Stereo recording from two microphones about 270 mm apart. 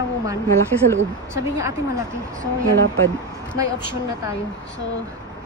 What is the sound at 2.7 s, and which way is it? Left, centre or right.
Speech, right.